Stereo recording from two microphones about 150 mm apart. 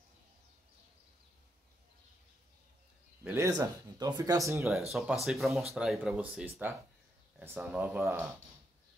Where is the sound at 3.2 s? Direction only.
15° right (ahead or behind).